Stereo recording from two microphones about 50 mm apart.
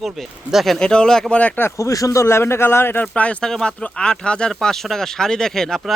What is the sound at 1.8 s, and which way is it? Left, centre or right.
A man's voice, left.